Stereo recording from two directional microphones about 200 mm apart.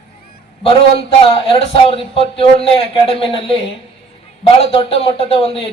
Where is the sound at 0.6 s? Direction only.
30° left (ahead or behind).